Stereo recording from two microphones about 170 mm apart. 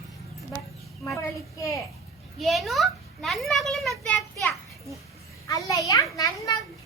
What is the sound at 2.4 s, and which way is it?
A child's voice, centre (ahead or behind).